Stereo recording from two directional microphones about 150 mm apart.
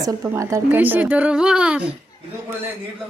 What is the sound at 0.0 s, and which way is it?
A woman's voice, 20° right (ahead or behind).